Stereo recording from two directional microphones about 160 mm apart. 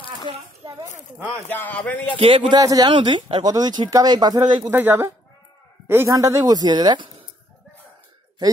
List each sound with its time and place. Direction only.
1.5 s speech: 10° left (ahead or behind)
2.1 s a man's voice: 35° right (ahead or behind)
2.6 s speech: 25° right (ahead or behind)
4.6 s speech: 15° right (ahead or behind)